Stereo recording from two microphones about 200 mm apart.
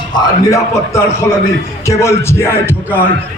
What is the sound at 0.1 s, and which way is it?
Speech, 15° left (ahead or behind).